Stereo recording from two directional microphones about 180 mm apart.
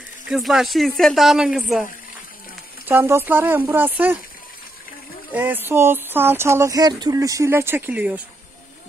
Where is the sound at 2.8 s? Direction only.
10° right (ahead or behind).